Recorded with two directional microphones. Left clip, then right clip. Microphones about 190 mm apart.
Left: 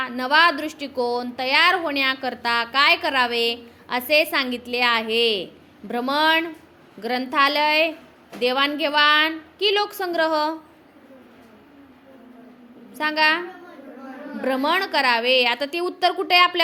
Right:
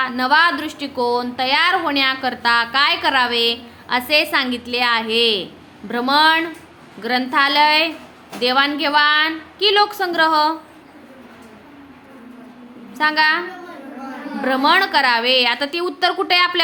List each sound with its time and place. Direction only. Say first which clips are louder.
0.0 s a woman's voice: right 3 dB; 20° left (ahead or behind)
12.9 s a woman's voice: right 4 dB; 20° left (ahead or behind)
14.4 s a woman's voice: right 6 dB; 15° left (ahead or behind)